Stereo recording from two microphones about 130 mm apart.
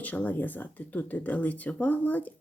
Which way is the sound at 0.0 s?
10° left (ahead or behind).